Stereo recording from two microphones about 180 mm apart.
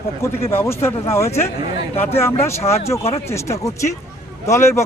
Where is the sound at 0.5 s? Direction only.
15° left (ahead or behind).